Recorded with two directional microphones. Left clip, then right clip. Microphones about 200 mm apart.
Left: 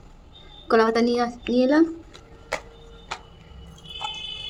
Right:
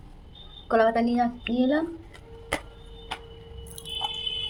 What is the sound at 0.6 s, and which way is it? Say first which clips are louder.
A woman's voice: left 3 dB; 60° left (ahead or behind).